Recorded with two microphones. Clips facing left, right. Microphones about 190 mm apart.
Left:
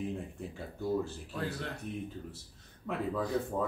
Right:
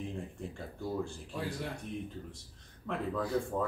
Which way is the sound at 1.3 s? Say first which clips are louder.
Left 1 dB; 10° right (ahead or behind).